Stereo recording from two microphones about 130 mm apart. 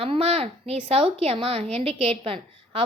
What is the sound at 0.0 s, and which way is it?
A woman's voice, 45° right (ahead or behind).